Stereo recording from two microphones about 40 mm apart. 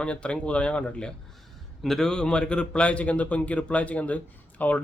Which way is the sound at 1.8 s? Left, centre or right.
Centre.